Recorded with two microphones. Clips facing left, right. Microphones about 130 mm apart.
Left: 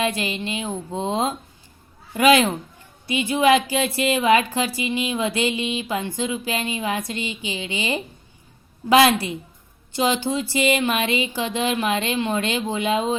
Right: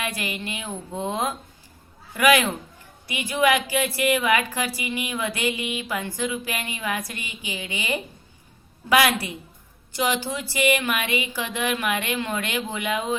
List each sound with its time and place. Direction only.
0.0 s a woman's voice: 25° left (ahead or behind)